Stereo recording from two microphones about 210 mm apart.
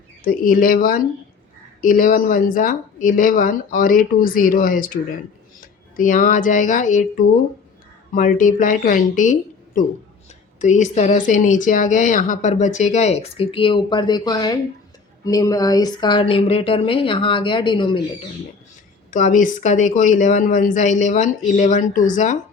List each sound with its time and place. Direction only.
0.3 s speech: 40° left (ahead or behind); by 18.0 s 20° left (ahead or behind)
19.1 s speech: 40° left (ahead or behind)